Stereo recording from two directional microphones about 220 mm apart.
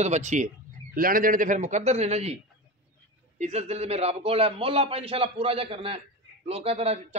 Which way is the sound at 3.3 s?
30° right (ahead or behind).